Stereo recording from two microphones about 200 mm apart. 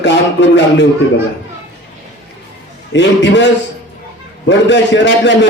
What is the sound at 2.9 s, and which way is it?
A man's voice, 65° left (ahead or behind).